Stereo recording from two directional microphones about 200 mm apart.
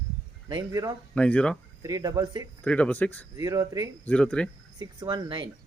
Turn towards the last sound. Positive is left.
turn(degrees=-20)  # may be behind; listen again after turning